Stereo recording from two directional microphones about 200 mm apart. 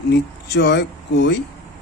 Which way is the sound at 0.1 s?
55° left (ahead or behind).